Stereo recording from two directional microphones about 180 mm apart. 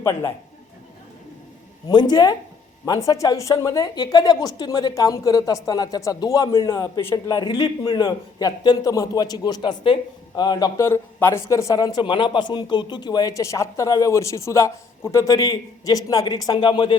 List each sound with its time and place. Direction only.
0.0 s a man's voice: 15° left (ahead or behind)
1.9 s a woman's voice: 25° left (ahead or behind)